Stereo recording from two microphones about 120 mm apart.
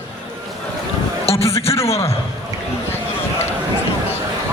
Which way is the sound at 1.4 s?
55° left (ahead or behind).